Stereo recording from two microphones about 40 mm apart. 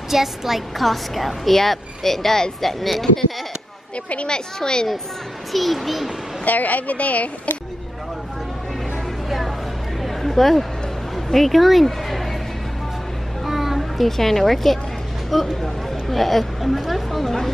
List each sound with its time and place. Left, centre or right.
0.1 s a woman's voice: centre
4.3 s speech: centre
5.5 s a woman's voice: centre
6.4 s speech: left
10.0 s a sound: centre
11.3 s speech: centre
13.5 s children playing: centre
15.2 s speech: centre